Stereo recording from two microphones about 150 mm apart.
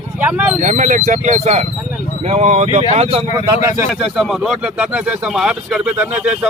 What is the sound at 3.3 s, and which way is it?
Speech, 20° right (ahead or behind).